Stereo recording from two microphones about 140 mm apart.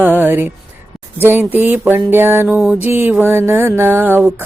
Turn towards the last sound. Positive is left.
turn(degrees=-15)  # may be behind; listen again after turning